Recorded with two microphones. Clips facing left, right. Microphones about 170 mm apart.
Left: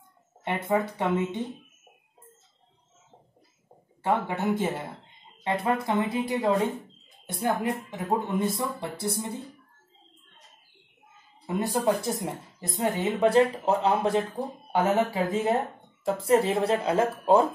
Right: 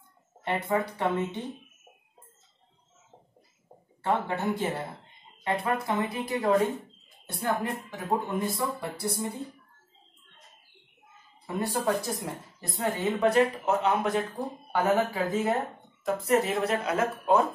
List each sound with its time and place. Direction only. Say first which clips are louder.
0.4 s speech: left 2 dB; 20° left (ahead or behind)
4.0 s speech: left 1 dB; 20° left (ahead or behind)
11.4 s speech: left 3 dB; 20° left (ahead or behind)